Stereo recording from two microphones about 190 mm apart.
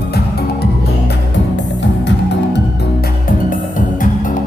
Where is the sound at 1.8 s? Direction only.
70° left (ahead or behind).